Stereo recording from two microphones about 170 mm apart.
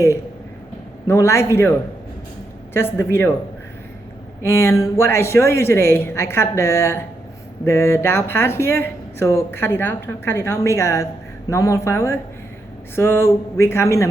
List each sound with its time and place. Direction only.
1.0 s speech: 15° left (ahead or behind)
2.7 s speech: 15° left (ahead or behind)
4.4 s speech: 15° left (ahead or behind)